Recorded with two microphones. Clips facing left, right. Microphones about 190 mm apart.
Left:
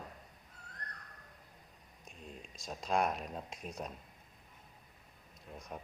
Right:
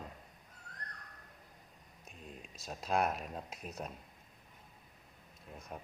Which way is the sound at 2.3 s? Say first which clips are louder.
Left 1 dB; 5° right (ahead or behind).